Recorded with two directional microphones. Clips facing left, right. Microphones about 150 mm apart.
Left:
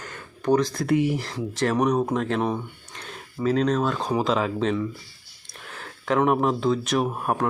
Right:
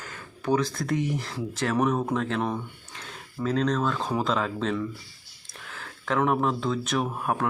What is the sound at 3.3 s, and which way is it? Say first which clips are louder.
Speech: left 3 dB; 5° left (ahead or behind).